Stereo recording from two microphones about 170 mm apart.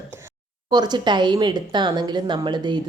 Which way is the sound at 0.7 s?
25° right (ahead or behind).